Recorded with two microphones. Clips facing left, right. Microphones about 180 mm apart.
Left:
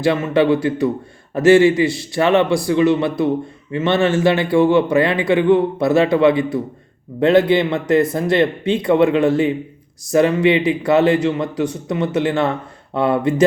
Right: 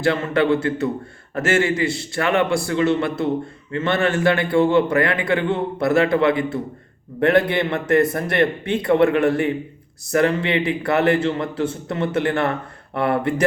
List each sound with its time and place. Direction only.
0.0 s a man's voice: 15° left (ahead or behind)